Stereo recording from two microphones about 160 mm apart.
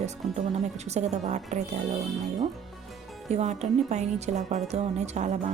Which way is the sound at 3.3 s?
45° right (ahead or behind).